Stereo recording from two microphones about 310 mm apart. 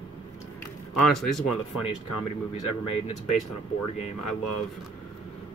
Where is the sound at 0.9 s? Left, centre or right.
Centre.